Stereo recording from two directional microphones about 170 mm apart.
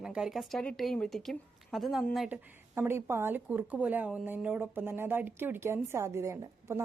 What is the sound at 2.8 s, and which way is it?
Speech, 15° right (ahead or behind).